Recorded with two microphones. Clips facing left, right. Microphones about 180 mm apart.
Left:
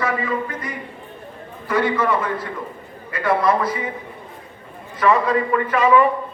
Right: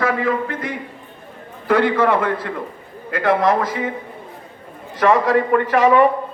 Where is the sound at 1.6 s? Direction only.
65° right (ahead or behind).